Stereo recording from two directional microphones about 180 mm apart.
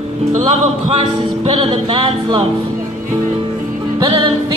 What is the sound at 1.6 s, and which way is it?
Music, 30° right (ahead or behind).